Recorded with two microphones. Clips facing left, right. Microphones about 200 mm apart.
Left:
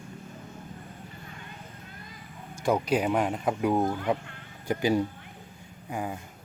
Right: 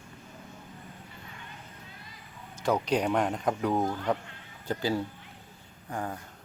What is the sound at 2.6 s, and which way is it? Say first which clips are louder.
Speech: left 2 dB; 10° left (ahead or behind).